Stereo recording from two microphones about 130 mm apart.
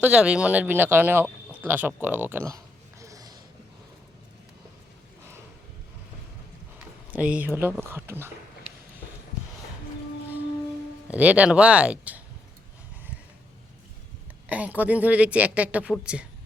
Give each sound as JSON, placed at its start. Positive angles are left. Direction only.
{"t": 0.0, "sound": "a woman's voice", "side_deg": -5}
{"t": 3.0, "sound": "a sound", "side_deg": -25}
{"t": 6.7, "sound": "speech", "side_deg": -10}
{"t": 11.1, "sound": "a woman's voice", "side_deg": -10}
{"t": 14.5, "sound": "a woman's voice", "side_deg": -10}